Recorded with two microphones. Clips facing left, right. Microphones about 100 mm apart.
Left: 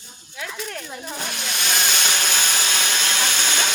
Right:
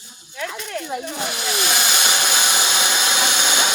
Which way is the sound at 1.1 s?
5° right (ahead or behind).